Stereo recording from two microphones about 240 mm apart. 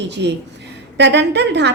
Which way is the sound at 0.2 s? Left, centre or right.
Right.